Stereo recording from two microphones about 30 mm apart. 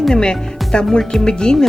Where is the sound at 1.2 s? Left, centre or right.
Left.